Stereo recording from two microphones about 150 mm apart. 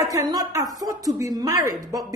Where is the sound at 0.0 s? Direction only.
20° right (ahead or behind).